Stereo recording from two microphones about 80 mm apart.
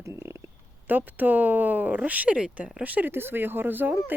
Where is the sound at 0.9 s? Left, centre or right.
Right.